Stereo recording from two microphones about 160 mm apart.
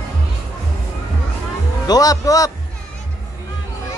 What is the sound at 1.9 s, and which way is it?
Speech, 20° left (ahead or behind).